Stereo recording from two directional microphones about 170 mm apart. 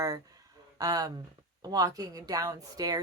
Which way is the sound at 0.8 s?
20° right (ahead or behind).